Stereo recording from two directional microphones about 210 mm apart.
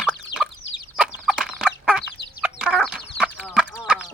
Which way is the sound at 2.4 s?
5° right (ahead or behind).